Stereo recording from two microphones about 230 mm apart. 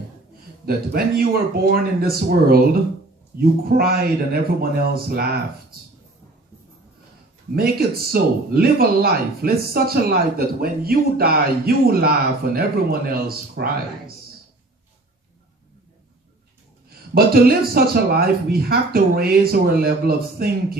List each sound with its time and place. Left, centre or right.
0.6 s speech: right
7.5 s speech: right
17.2 s speech: right